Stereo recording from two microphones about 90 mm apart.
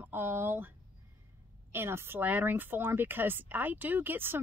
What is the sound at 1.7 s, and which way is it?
Speech, 25° right (ahead or behind).